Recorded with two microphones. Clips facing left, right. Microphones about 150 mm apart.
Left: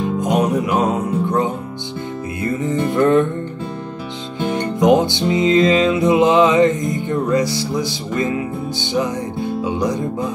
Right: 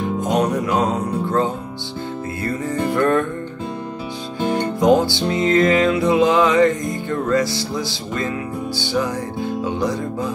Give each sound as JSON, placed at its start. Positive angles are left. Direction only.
{"t": 0.2, "sound": "music", "side_deg": 20}
{"t": 4.5, "sound": "music", "side_deg": 20}